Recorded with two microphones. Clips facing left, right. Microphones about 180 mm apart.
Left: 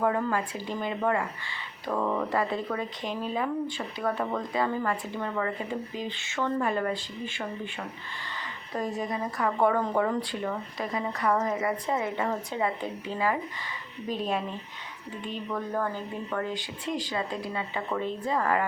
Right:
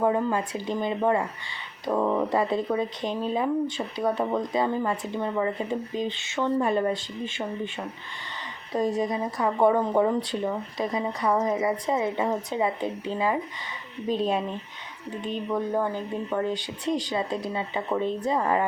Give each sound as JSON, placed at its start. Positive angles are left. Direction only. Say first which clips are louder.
{"t": 0.0, "sound": "speech", "louder": "right 3 dB", "side_deg": -20}
{"t": 3.0, "sound": "speech", "louder": "right 4 dB", "side_deg": 5}
{"t": 3.3, "sound": "speech", "louder": "right 4 dB", "side_deg": -20}
{"t": 8.7, "sound": "a woman's voice", "louder": "right 6 dB", "side_deg": -35}
{"t": 9.0, "sound": "a woman's voice", "louder": "right 3 dB", "side_deg": -20}
{"t": 15.4, "sound": "speech", "louder": "right 4 dB", "side_deg": -20}